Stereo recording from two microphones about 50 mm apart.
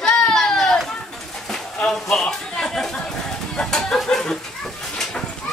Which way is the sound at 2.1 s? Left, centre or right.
Centre.